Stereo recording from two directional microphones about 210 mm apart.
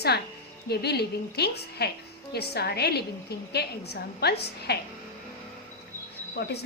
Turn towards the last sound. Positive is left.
turn(degrees=50)  # may be behind; listen again after turning